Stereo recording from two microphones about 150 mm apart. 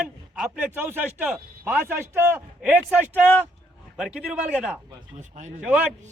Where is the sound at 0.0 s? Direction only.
5° right (ahead or behind).